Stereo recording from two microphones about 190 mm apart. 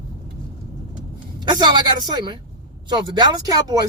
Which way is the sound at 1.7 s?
25° right (ahead or behind).